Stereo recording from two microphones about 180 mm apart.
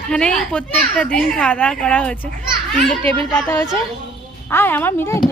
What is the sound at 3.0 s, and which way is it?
Speech, 30° right (ahead or behind).